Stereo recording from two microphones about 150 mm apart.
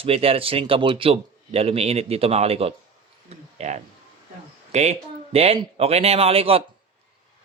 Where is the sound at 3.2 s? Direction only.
50° right (ahead or behind).